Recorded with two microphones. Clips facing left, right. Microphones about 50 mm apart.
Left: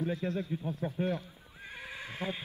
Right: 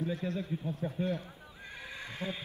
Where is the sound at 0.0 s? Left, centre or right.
Left.